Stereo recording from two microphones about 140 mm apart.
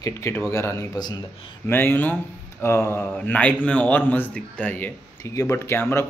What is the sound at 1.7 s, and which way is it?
A man's voice, 15° left (ahead or behind).